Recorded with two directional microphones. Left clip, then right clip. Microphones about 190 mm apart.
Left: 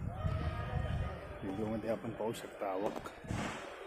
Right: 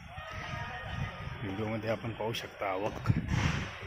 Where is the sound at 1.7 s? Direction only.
Centre (ahead or behind).